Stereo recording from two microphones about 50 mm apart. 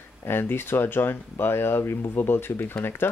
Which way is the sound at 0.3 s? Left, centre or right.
Left.